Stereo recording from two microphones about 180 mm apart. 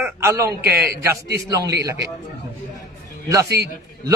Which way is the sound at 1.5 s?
20° right (ahead or behind).